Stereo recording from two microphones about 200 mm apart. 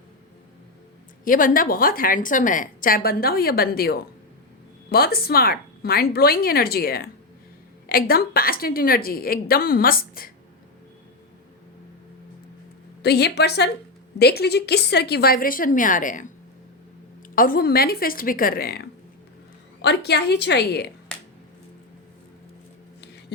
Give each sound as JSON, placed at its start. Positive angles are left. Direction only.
{"t": 1.2, "sound": "a woman's voice", "side_deg": 45}
{"t": 13.0, "sound": "a woman's voice", "side_deg": 55}
{"t": 17.3, "sound": "a woman's voice", "side_deg": 45}